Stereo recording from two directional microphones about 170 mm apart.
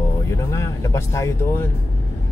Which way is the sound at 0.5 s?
15° left (ahead or behind).